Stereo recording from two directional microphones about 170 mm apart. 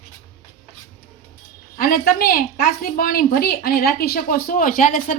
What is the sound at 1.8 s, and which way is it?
A woman's voice, 60° left (ahead or behind).